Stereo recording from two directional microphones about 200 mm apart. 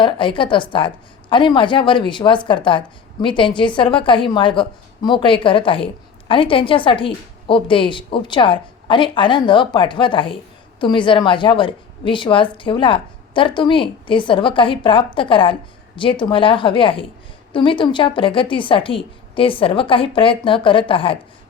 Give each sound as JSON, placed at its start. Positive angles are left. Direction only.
{"t": 0.0, "sound": "a woman's voice", "side_deg": 25}